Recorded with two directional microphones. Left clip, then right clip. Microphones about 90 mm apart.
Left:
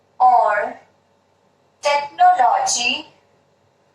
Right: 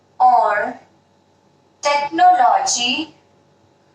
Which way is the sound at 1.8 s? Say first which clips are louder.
Right 1 dB; 20° left (ahead or behind).